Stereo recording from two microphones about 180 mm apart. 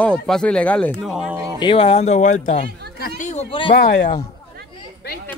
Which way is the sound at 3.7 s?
70° left (ahead or behind).